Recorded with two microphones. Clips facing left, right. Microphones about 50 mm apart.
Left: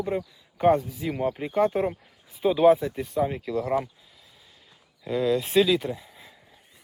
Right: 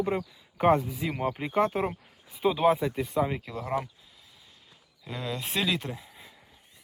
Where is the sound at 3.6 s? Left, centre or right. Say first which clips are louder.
Left 6 dB; centre.